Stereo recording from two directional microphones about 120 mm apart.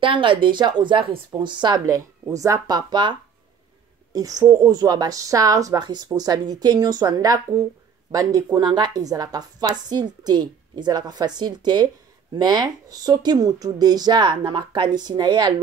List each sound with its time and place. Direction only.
0.0 s a woman's voice: 45° right (ahead or behind)
2.0 s a woman's voice: 25° right (ahead or behind)